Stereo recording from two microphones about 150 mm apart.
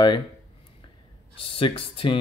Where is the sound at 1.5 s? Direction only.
35° left (ahead or behind).